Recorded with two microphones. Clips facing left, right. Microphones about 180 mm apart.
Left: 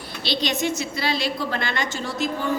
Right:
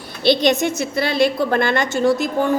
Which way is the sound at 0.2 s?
55° right (ahead or behind).